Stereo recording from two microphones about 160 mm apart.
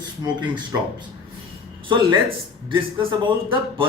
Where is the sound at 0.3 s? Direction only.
30° right (ahead or behind).